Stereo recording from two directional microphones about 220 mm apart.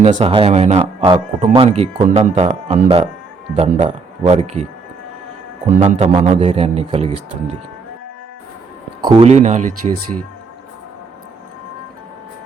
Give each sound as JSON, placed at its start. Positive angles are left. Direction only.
{"t": 0.0, "sound": "speech", "side_deg": -25}
{"t": 5.8, "sound": "speech", "side_deg": -30}
{"t": 9.0, "sound": "speech", "side_deg": -25}